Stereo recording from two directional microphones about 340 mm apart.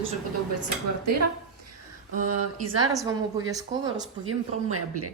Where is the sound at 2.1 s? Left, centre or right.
Right.